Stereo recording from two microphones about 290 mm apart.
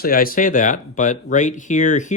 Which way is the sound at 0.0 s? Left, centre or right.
Left.